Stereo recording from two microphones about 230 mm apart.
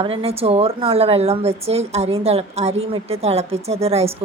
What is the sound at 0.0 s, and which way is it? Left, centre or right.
A woman's voice, right.